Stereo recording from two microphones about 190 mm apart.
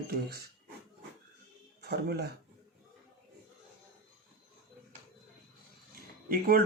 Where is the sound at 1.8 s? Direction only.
60° right (ahead or behind).